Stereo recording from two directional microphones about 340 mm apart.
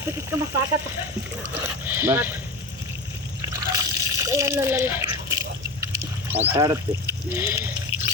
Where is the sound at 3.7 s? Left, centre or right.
Centre.